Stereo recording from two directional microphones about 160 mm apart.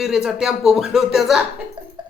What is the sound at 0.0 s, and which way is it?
Speech, 5° right (ahead or behind).